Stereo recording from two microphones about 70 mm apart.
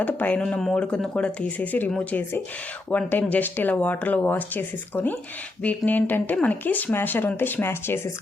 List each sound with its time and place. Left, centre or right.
0.0 s speech: left
0.6 s speech: centre
2.9 s speech: left